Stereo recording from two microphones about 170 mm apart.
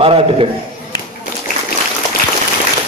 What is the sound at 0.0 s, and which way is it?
Speech, 35° right (ahead or behind).